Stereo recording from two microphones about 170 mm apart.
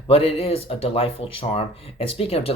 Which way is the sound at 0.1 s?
35° left (ahead or behind).